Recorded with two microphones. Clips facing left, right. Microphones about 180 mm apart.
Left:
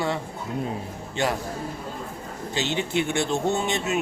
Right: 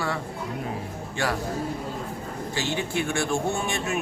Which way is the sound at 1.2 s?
20° left (ahead or behind).